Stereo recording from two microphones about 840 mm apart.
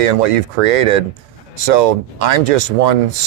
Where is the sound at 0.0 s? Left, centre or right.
Right.